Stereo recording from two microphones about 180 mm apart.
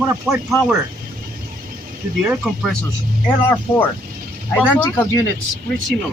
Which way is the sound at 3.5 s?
10° left (ahead or behind).